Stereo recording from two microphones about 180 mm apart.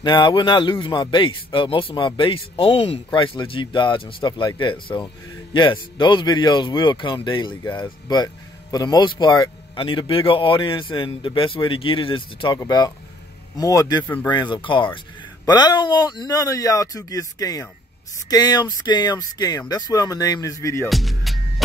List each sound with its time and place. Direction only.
0.0 s speech: 25° left (ahead or behind)
14.0 s speech: 10° left (ahead or behind)
14.3 s speech: 25° left (ahead or behind)
20.9 s music: centre (ahead or behind)